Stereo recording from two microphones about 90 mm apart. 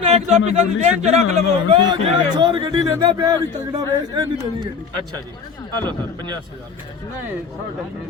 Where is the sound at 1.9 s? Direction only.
55° right (ahead or behind).